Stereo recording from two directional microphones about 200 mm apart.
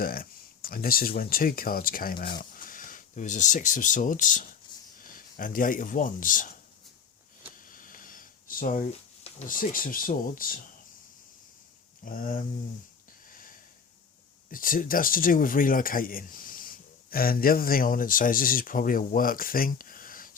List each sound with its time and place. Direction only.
0.0 s speech: 45° left (ahead or behind)
7.5 s a sound: 45° left (ahead or behind)
12.0 s speech: 45° left (ahead or behind)
14.5 s speech: 45° left (ahead or behind)